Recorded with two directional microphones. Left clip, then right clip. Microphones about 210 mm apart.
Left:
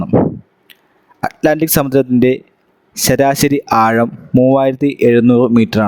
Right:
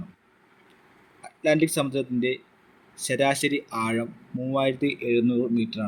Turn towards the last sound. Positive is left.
turn(degrees=50)  # may be behind; listen again after turning